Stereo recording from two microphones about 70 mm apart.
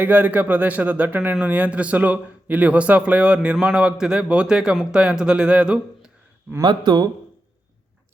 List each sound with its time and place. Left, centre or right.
0.0 s a man's voice: right
6.6 s speech: right